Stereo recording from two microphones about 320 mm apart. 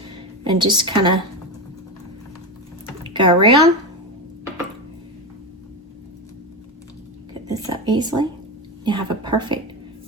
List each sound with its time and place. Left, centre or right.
0.4 s a woman's voice: centre
3.0 s speech: centre
7.5 s a sound: centre
8.8 s a woman's voice: centre